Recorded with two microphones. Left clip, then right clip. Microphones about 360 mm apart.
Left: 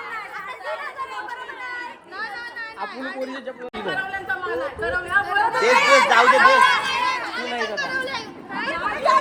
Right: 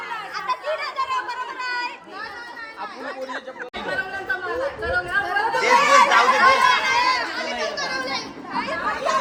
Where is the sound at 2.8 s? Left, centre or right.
Left.